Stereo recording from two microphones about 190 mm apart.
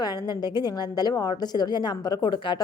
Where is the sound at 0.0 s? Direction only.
20° left (ahead or behind).